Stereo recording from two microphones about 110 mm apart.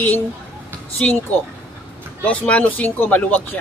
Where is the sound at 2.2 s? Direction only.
10° left (ahead or behind).